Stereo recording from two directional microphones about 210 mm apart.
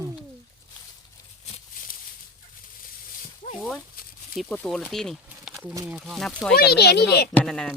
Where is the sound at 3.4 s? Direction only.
30° left (ahead or behind).